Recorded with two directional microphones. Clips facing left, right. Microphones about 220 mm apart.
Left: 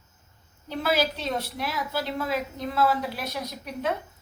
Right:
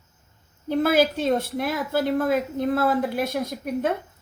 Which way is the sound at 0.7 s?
50° right (ahead or behind).